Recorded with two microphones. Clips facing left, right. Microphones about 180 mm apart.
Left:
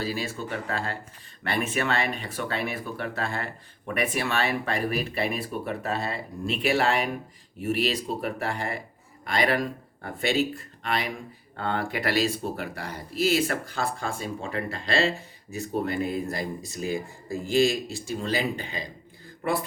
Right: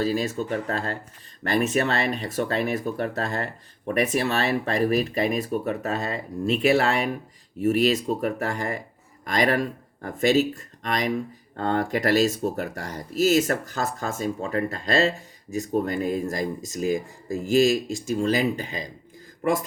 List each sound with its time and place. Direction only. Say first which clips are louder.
0.0 s speech: right 6 dB; 40° right (ahead or behind)